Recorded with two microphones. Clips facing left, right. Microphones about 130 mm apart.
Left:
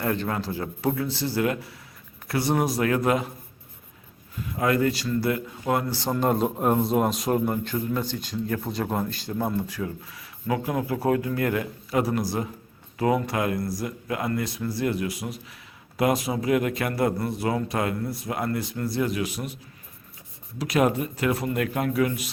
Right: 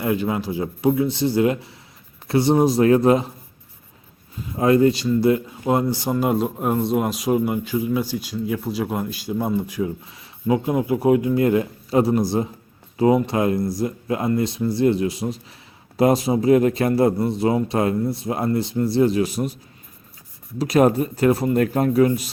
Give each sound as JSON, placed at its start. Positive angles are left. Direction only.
{"t": 0.0, "sound": "a man's voice", "side_deg": -10}
{"t": 4.5, "sound": "a man's voice", "side_deg": -25}
{"t": 20.6, "sound": "speech", "side_deg": -35}